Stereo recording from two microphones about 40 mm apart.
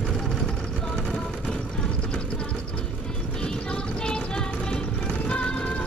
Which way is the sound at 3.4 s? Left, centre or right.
Left.